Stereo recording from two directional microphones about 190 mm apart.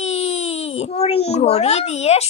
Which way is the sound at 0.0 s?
35° left (ahead or behind).